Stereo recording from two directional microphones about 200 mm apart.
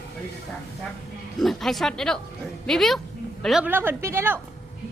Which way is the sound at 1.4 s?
Centre (ahead or behind).